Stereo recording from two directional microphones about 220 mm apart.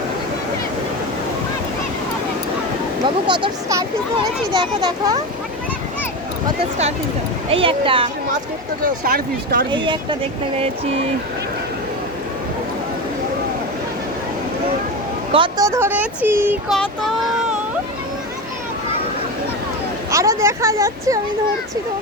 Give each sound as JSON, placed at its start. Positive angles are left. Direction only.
{"t": 3.2, "sound": "a child's voice", "side_deg": -20}
{"t": 7.5, "sound": "a child's voice", "side_deg": -25}
{"t": 8.8, "sound": "speech", "side_deg": -40}
{"t": 9.7, "sound": "a child's voice", "side_deg": -20}
{"t": 15.3, "sound": "speech", "side_deg": -20}
{"t": 20.1, "sound": "speech", "side_deg": -15}